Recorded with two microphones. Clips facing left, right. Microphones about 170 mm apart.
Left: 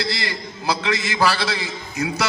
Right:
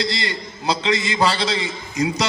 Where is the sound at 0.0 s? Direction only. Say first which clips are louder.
Right 2 dB; 20° right (ahead or behind).